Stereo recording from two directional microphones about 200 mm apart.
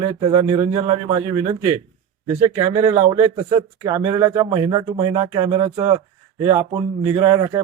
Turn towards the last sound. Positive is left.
turn(degrees=-20)  # may be behind; listen again after turning